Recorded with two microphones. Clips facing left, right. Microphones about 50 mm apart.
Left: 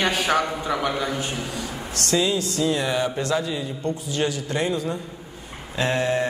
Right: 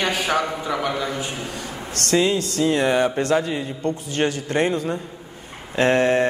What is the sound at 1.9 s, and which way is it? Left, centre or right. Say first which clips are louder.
Mantra: right 3 dB; right.